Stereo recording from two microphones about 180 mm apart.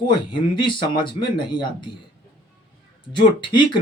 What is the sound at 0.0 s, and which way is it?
Speech, 25° left (ahead or behind).